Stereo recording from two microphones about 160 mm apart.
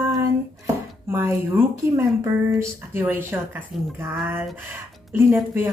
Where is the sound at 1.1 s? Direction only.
15° right (ahead or behind).